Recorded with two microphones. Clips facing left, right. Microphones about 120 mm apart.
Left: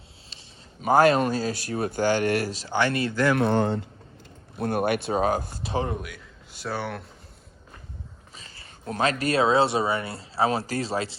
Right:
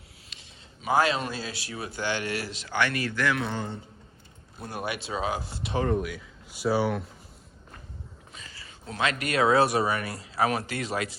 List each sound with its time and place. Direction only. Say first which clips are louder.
0.8 s speech: left 6 dB; 45° left (ahead or behind); by 3.3 s 30° left (ahead or behind)
3.3 s speech: left 9 dB; 55° left (ahead or behind); by 3.8 s 70° left (ahead or behind)
4.5 s speech: left 9 dB; 60° left (ahead or behind)
5.9 s speech: right 6 dB; centre (ahead or behind)
8.9 s speech: left 4 dB; 35° left (ahead or behind)